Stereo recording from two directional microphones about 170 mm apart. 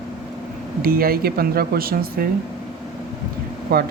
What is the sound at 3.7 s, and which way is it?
Speech, 65° right (ahead or behind).